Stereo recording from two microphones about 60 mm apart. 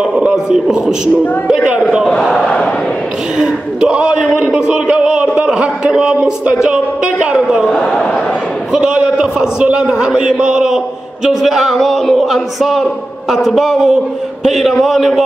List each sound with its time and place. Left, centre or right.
0.5 s a man's voice: centre
2.0 s speech: centre
2.3 s battle cry: centre
3.3 s a man's voice: centre
7.6 s speech: centre
8.7 s a man's voice: centre